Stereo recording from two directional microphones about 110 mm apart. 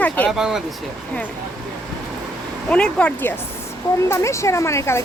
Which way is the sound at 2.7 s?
10° left (ahead or behind).